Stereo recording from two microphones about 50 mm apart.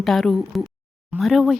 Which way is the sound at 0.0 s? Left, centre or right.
Centre.